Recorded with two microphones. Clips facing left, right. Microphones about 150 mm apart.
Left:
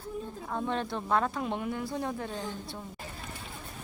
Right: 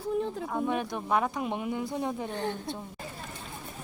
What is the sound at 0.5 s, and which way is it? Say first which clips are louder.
A woman's voice: even; 10° right (ahead or behind).